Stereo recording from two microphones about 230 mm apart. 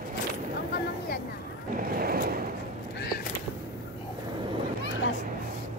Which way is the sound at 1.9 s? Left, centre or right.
Right.